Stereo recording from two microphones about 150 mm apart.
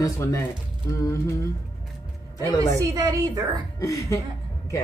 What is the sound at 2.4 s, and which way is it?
Speech, 20° left (ahead or behind).